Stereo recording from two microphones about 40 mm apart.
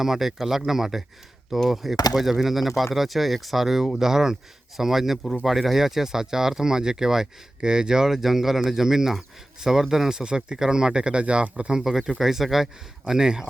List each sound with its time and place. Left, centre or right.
0.0 s speech: centre
1.5 s speech: centre; by 11.8 s right
11.8 s speech: centre